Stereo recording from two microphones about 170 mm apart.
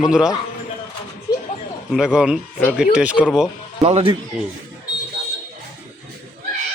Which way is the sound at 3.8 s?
40° right (ahead or behind).